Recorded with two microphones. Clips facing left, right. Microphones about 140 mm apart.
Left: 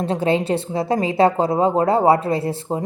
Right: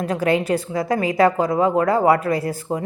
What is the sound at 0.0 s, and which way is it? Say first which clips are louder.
Speech: even; 25° left (ahead or behind).